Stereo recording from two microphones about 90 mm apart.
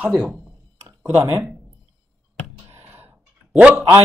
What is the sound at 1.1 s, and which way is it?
Speech, 30° right (ahead or behind).